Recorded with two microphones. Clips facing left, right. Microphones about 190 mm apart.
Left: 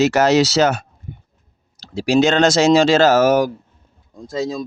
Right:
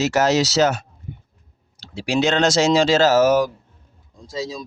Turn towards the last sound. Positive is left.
turn(degrees=55)  # may be behind; listen again after turning